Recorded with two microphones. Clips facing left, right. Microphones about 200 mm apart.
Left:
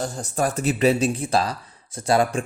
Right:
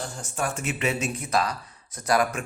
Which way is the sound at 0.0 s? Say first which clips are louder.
Left 6 dB; 35° left (ahead or behind).